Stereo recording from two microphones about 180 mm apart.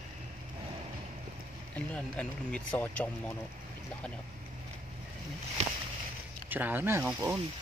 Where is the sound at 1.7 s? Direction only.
5° left (ahead or behind).